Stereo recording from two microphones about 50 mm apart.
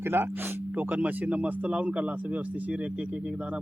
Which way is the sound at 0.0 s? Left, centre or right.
Right.